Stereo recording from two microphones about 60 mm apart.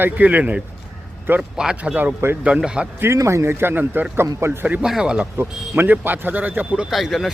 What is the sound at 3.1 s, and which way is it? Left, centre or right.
Speech, right.